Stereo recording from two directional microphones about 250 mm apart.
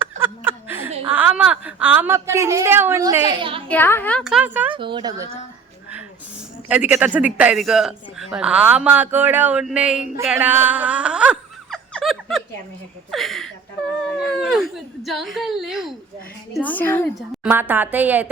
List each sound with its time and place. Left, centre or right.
0.0 s chuckle: centre
1.1 s a woman's voice: centre
3.7 s a man's voice: centre
4.7 s speech: centre
6.7 s a man's voice: centre
10.2 s a sound: centre
13.1 s a man's voice: centre
17.4 s a woman's voice: centre